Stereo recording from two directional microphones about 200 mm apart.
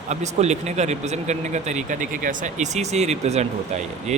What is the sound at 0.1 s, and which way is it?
Speech, 35° right (ahead or behind).